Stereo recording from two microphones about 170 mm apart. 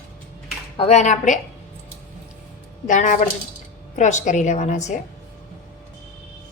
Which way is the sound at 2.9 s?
45° left (ahead or behind).